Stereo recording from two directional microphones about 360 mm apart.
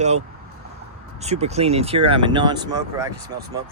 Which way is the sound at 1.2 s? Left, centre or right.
Centre.